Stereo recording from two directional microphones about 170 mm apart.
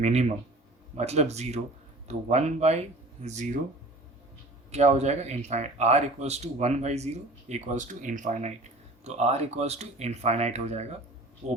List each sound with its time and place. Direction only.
0.0 s speech: 40° right (ahead or behind)
4.7 s speech: 40° right (ahead or behind)